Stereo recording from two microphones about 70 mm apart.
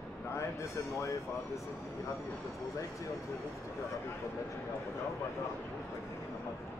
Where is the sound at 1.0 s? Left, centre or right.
Left.